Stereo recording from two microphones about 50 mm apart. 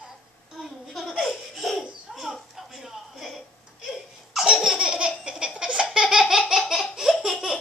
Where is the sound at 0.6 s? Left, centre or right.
Centre.